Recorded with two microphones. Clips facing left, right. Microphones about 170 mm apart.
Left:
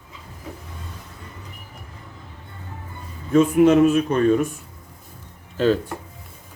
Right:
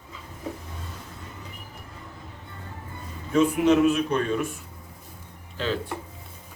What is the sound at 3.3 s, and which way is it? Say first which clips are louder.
Speech: left 5 dB; 45° left (ahead or behind).